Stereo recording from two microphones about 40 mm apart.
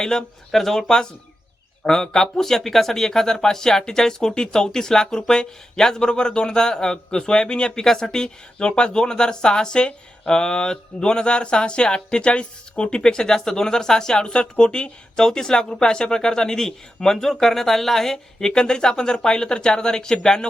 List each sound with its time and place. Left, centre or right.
0.0 s speech: centre